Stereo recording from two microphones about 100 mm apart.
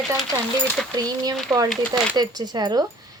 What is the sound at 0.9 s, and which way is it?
Speech, 40° right (ahead or behind).